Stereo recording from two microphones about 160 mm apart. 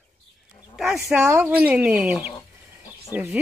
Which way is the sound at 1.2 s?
15° right (ahead or behind).